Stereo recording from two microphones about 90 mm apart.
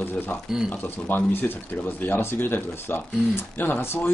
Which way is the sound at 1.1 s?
20° left (ahead or behind).